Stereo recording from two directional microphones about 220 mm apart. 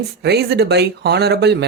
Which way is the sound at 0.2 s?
50° right (ahead or behind).